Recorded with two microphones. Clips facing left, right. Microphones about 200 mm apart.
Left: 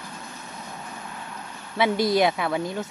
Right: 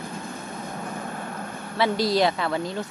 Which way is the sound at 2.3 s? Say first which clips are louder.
Even; 10° left (ahead or behind).